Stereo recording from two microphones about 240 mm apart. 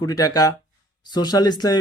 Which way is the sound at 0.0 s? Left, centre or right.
Centre.